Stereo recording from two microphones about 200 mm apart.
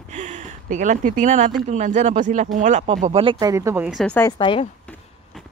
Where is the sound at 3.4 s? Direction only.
15° right (ahead or behind).